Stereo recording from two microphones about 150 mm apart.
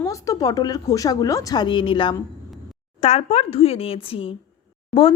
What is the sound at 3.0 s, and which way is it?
Speech, 45° left (ahead or behind).